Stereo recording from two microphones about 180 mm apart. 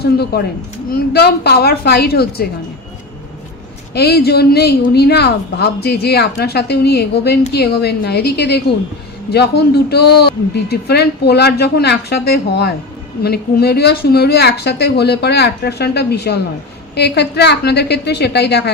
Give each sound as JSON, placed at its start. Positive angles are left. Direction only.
{"t": 0.0, "sound": "a woman's voice", "side_deg": 60}
{"t": 3.9, "sound": "a woman's voice", "side_deg": 60}